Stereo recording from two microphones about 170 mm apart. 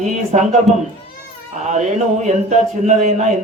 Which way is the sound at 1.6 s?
45° right (ahead or behind).